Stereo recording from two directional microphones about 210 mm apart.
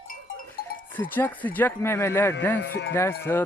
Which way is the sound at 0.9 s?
10° left (ahead or behind).